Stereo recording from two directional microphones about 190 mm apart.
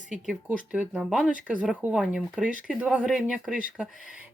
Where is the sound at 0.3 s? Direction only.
5° right (ahead or behind).